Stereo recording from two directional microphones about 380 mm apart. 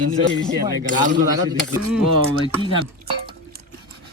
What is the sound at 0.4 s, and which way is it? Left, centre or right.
Speech, centre.